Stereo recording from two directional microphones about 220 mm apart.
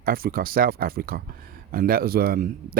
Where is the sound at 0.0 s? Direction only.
40° right (ahead or behind).